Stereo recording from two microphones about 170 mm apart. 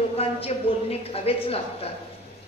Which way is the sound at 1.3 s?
35° left (ahead or behind).